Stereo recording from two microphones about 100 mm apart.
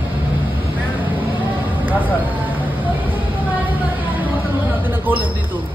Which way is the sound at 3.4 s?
15° right (ahead or behind).